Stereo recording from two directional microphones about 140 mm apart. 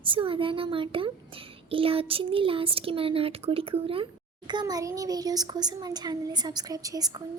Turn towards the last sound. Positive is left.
turn(degrees=-25)  # may be behind; listen again after turning